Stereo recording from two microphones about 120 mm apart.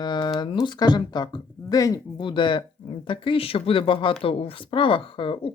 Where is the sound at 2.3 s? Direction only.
40° left (ahead or behind).